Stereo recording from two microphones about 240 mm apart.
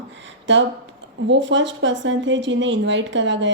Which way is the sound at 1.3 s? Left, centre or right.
Right.